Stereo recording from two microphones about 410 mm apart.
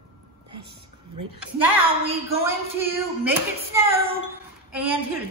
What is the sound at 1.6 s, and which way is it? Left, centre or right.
A woman's voice, centre.